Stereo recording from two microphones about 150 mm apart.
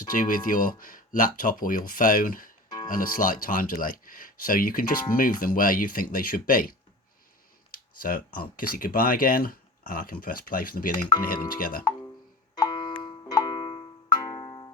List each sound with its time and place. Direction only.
0.1 s speech: 65° left (ahead or behind)
2.6 s music: 25° left (ahead or behind)
2.9 s speech: 65° left (ahead or behind)
11.9 s music: 25° left (ahead or behind)